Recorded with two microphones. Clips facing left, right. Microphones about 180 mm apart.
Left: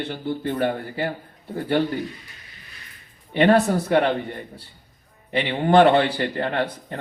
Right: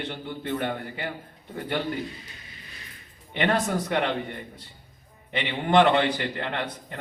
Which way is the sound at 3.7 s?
35° left (ahead or behind).